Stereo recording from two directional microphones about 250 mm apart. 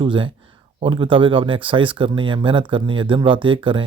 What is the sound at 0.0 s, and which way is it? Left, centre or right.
Speech, centre.